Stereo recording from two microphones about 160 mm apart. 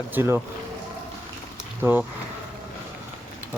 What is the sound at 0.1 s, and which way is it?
Speech, 15° right (ahead or behind).